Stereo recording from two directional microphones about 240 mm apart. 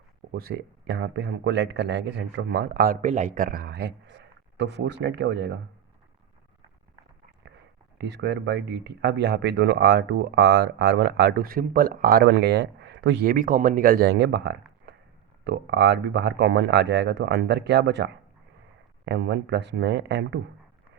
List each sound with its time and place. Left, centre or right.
0.3 s speech: right
7.9 s speech: right